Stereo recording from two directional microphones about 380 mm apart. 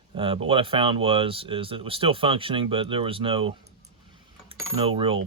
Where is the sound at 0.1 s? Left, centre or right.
Centre.